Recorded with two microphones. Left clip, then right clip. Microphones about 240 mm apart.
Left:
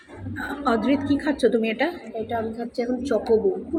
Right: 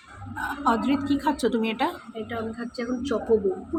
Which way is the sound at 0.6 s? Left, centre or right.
Right.